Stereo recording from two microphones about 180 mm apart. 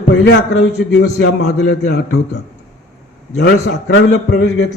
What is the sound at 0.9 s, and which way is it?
A man's voice, 70° left (ahead or behind).